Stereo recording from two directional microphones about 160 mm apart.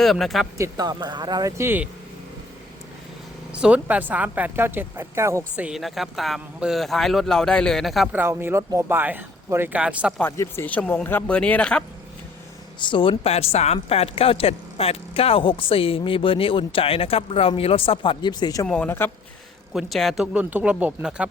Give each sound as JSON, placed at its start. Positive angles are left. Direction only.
{"t": 0.0, "sound": "speech", "side_deg": 0}
{"t": 0.6, "sound": "speech", "side_deg": -25}
{"t": 3.5, "sound": "speech", "side_deg": -10}
{"t": 5.5, "sound": "speech", "side_deg": -5}
{"t": 8.1, "sound": "speech", "side_deg": -15}
{"t": 10.2, "sound": "speech", "side_deg": 15}
{"t": 12.8, "sound": "speech", "side_deg": 30}
{"t": 18.6, "sound": "speech", "side_deg": 10}
{"t": 19.7, "sound": "speech", "side_deg": 0}